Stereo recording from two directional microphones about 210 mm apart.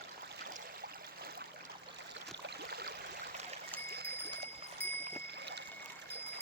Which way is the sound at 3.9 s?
50° right (ahead or behind).